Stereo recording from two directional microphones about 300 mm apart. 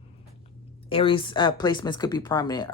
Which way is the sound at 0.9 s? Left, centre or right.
Centre.